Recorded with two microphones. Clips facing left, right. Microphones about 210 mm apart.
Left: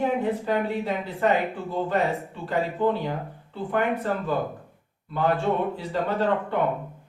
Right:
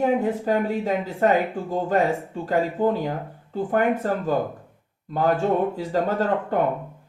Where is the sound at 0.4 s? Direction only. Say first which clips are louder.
Right 3 dB; 40° right (ahead or behind).